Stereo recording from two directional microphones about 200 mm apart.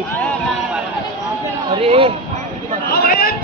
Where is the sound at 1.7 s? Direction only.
30° right (ahead or behind).